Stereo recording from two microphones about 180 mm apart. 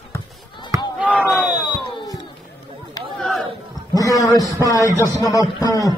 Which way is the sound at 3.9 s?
20° left (ahead or behind).